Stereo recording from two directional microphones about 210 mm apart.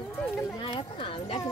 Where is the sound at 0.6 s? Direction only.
25° left (ahead or behind).